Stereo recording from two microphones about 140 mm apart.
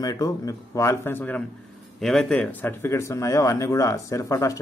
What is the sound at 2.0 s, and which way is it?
Speech, centre (ahead or behind).